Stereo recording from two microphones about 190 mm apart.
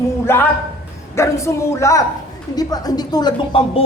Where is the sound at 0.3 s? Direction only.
15° left (ahead or behind).